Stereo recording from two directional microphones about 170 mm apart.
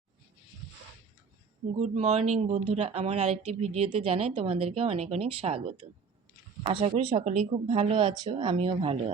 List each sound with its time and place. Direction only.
1.8 s speech: 40° right (ahead or behind)